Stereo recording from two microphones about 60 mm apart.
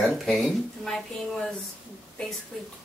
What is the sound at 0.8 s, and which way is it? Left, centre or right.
Speech, centre.